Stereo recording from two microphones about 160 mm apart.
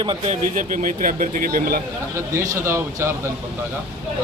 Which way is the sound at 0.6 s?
55° right (ahead or behind).